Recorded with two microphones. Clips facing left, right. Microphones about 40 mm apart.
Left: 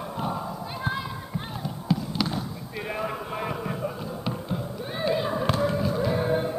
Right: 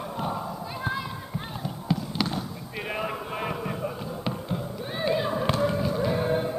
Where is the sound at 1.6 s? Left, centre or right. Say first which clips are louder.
Left 2 dB; centre.